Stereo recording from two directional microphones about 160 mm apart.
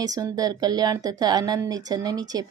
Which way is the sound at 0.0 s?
25° right (ahead or behind).